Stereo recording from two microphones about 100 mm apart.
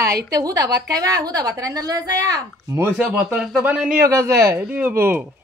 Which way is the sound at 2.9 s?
5° right (ahead or behind).